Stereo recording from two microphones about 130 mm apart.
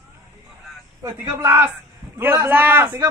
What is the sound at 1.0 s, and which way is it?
A man's voice, 15° right (ahead or behind).